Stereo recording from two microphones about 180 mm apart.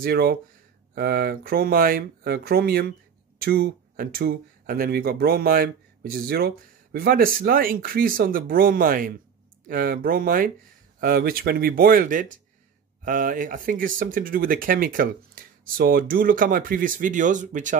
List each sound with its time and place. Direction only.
0.0 s speech: 60° right (ahead or behind); by 17.7 s 45° right (ahead or behind)